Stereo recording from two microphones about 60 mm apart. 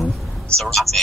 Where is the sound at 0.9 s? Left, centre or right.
Right.